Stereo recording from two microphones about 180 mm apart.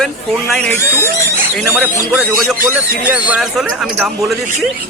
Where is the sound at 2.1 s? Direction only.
5° right (ahead or behind).